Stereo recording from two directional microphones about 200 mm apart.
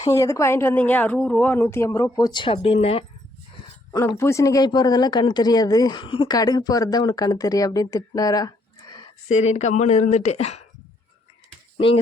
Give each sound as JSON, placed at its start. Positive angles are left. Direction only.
{"t": 0.0, "sound": "a woman's voice", "side_deg": 15}
{"t": 3.9, "sound": "speech", "side_deg": 15}
{"t": 9.3, "sound": "a woman's voice", "side_deg": 35}